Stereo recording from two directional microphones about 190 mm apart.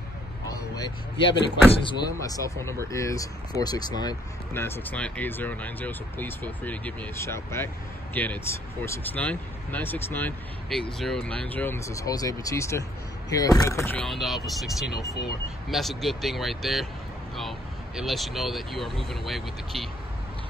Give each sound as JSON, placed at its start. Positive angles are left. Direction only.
{"t": 0.5, "sound": "vehicle", "side_deg": 20}
{"t": 1.7, "sound": "speech", "side_deg": 25}